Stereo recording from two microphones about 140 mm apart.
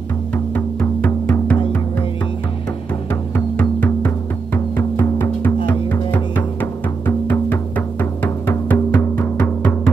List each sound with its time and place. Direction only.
0.3 s music: 10° left (ahead or behind)
3.1 s music: 15° left (ahead or behind)
5.7 s music: 10° left (ahead or behind)